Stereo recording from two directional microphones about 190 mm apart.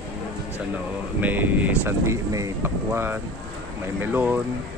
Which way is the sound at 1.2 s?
10° right (ahead or behind).